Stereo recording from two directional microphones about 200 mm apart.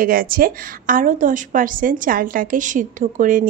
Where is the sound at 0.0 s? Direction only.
45° right (ahead or behind).